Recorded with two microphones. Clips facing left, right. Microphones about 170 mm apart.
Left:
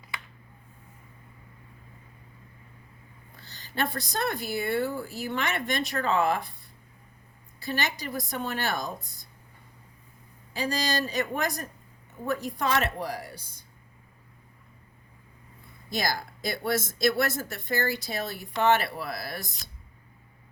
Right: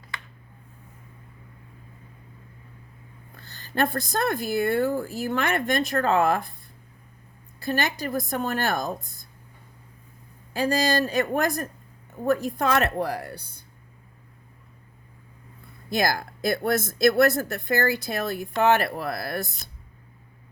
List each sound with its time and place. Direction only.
3.3 s speech: 55° right (ahead or behind)
7.6 s speech: 50° right (ahead or behind)
10.5 s speech: 50° right (ahead or behind)
15.9 s speech: 55° right (ahead or behind)